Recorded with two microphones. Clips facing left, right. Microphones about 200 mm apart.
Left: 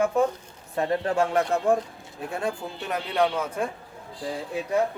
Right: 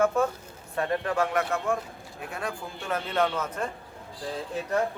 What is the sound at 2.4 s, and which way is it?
Speech, 15° left (ahead or behind).